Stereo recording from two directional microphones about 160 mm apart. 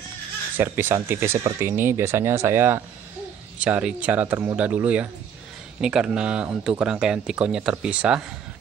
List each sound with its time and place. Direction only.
0.6 s speech: 15° right (ahead or behind)